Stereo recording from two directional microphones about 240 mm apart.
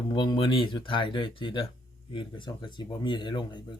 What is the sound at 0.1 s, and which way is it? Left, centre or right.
Speech, centre.